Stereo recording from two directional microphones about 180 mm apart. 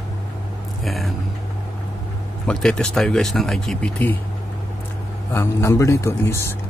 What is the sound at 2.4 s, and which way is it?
Speech, 5° left (ahead or behind).